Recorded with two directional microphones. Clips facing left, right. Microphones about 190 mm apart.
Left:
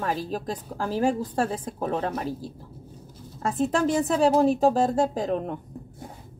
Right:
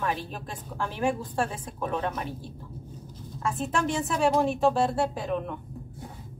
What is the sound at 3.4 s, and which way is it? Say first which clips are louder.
Speech: left 5 dB; 40° left (ahead or behind).